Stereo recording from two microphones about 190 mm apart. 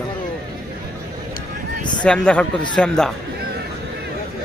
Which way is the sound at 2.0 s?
5° left (ahead or behind).